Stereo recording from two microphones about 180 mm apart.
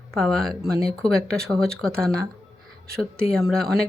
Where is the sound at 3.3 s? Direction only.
Centre (ahead or behind).